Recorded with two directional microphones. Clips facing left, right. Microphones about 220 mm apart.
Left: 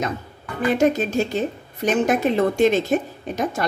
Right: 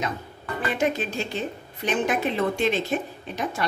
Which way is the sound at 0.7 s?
45° left (ahead or behind).